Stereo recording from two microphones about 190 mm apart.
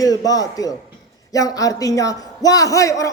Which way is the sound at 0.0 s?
20° left (ahead or behind).